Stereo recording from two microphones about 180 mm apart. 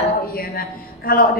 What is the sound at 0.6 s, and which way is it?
Speech, 55° left (ahead or behind).